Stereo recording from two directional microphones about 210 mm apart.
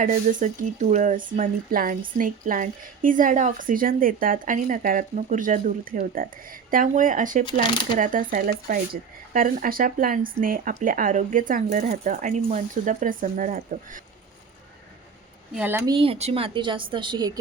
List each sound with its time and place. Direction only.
0.0 s speech: 40° right (ahead or behind)
15.5 s speech: 10° right (ahead or behind)
15.9 s speech: 25° right (ahead or behind)